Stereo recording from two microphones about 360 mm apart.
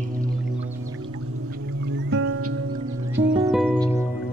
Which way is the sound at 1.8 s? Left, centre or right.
Right.